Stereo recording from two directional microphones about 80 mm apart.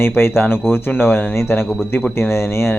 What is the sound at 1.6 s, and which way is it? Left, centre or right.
Speech, centre.